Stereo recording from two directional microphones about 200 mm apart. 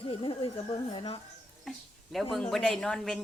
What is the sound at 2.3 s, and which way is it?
Speech, 5° left (ahead or behind).